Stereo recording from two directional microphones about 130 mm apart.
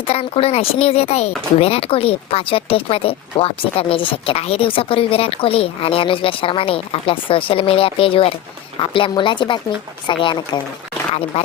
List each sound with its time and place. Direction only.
0.1 s a woman's voice: 50° left (ahead or behind)
11.3 s speech: 50° left (ahead or behind)